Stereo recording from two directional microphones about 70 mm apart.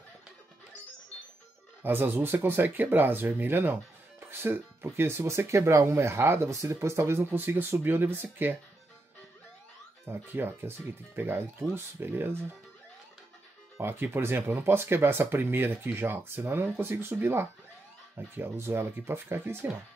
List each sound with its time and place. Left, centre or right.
1.8 s speech: right
10.0 s speech: right
13.7 s speech: right